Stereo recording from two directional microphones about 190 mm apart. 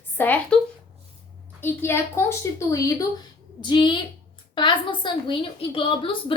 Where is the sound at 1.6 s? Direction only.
10° left (ahead or behind).